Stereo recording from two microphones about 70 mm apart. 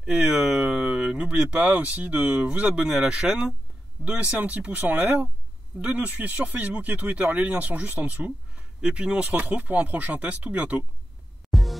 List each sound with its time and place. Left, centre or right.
0.0 s speech: centre
11.5 s music: centre